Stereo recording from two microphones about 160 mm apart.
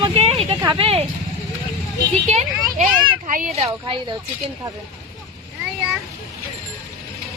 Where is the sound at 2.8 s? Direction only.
60° right (ahead or behind).